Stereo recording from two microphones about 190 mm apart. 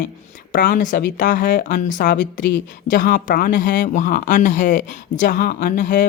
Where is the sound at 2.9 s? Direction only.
45° left (ahead or behind).